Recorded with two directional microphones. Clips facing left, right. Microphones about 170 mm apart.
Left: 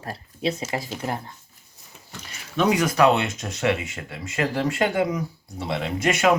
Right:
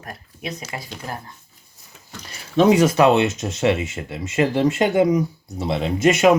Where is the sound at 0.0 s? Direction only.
30° left (ahead or behind).